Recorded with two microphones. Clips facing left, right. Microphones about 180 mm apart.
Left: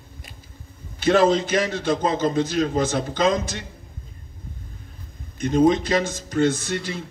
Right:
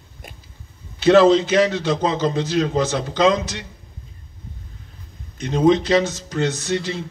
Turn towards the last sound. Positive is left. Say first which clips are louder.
# right 4 dB
turn(degrees=50)  # may be behind; listen again after turning